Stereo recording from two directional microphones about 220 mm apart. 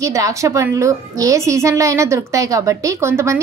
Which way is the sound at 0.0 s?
15° right (ahead or behind).